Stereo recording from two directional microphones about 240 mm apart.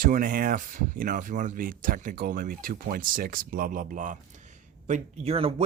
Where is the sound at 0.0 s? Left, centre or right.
Right.